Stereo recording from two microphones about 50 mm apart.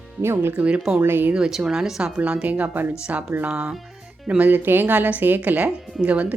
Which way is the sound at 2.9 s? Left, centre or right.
Right.